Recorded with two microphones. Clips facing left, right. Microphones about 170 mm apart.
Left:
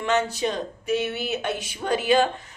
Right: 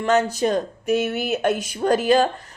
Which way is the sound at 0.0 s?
40° right (ahead or behind).